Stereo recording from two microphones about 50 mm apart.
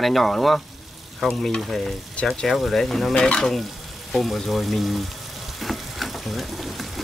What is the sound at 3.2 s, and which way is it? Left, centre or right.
Stir, centre.